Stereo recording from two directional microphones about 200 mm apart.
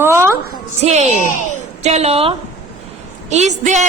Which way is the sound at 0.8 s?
35° right (ahead or behind).